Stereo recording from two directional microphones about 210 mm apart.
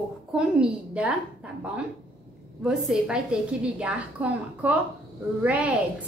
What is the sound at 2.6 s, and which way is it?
A woman's voice, 5° right (ahead or behind).